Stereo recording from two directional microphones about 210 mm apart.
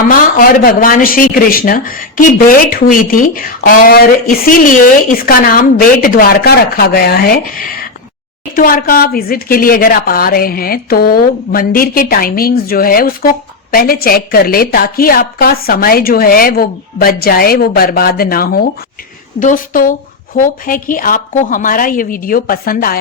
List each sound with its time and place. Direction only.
0.0 s a woman's voice: 40° left (ahead or behind)